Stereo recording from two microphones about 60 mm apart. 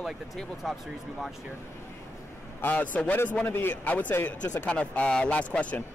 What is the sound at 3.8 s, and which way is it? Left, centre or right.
Speech, left.